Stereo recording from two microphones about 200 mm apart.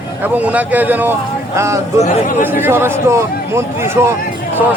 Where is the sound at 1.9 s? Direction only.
35° left (ahead or behind).